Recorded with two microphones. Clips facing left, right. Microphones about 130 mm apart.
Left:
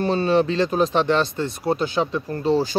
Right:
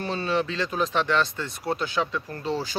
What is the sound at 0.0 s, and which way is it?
Speech, 30° left (ahead or behind).